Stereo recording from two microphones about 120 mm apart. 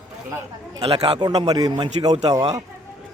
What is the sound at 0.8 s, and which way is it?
Speech, 55° right (ahead or behind).